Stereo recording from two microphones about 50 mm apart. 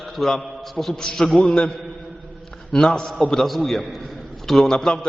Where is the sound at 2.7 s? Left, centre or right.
Centre.